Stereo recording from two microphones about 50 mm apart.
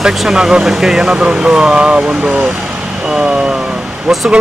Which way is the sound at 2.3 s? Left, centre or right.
Right.